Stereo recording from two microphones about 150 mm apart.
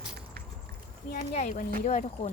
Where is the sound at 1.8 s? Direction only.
55° left (ahead or behind).